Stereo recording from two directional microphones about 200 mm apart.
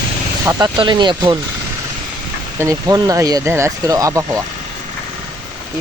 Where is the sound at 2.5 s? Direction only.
15° right (ahead or behind).